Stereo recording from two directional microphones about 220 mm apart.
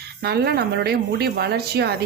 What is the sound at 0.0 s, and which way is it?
Speech, 45° right (ahead or behind).